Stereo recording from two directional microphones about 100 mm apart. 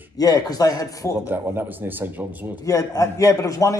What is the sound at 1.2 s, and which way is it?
A man's voice, 20° right (ahead or behind).